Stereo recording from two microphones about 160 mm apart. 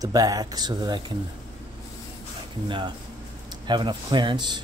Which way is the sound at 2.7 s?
30° right (ahead or behind).